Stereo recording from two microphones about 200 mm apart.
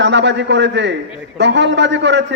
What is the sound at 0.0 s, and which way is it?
A man's voice, 60° right (ahead or behind).